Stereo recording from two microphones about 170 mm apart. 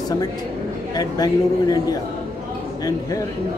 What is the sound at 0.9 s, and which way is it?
A man's voice, 25° left (ahead or behind).